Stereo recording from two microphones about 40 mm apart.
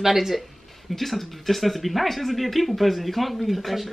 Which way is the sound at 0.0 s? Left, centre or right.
Centre.